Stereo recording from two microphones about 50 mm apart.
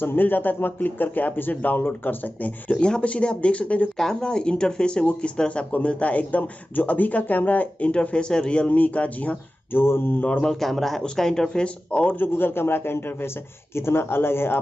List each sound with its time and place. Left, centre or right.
0.0 s speech: left
2.7 s speech: left
4.0 s speech: centre; by 7.9 s left
7.9 s speech: left
9.7 s a man's voice: left
10.4 s speech: centre; by 12.2 s left
12.2 s a man's voice: left